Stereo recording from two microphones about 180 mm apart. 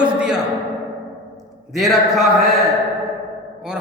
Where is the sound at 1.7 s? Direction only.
Centre (ahead or behind).